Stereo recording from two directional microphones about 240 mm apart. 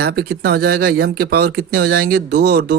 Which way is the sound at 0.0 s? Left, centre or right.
Right.